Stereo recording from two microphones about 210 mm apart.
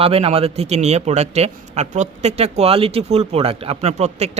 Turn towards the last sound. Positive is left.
turn(degrees=-30)  # may be behind; listen again after turning